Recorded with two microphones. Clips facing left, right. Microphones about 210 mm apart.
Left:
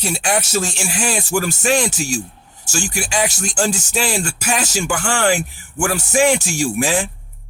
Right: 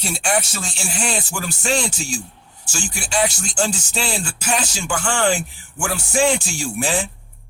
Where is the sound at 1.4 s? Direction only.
75° left (ahead or behind).